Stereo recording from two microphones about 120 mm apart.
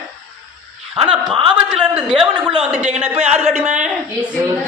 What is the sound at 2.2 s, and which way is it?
Speech, 40° right (ahead or behind).